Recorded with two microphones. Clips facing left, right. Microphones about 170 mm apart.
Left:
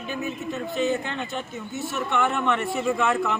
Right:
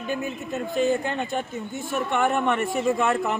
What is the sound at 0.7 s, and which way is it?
Speech, 45° right (ahead or behind).